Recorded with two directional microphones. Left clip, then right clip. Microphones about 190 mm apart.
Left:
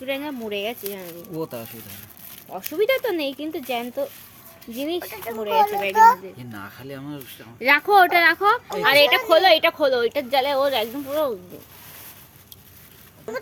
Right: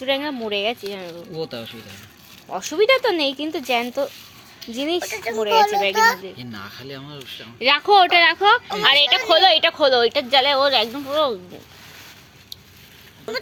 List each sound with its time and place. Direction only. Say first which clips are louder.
0.0 s a woman's voice: right 5 dB; 5° right (ahead or behind)
1.4 s speech: right 1 dB; 55° left (ahead or behind)
2.5 s a woman's voice: right 4 dB; centre (ahead or behind)
4.9 s speech: right 5 dB; 30° left (ahead or behind)
5.4 s a woman's voice: right 3 dB; centre (ahead or behind)
6.5 s speech: right 2 dB; 65° left (ahead or behind)
7.6 s a woman's voice: right 1 dB; 10° left (ahead or behind)
8.8 s speech: left 1 dB; 40° left (ahead or behind)
9.0 s a woman's voice: right 1 dB; centre (ahead or behind)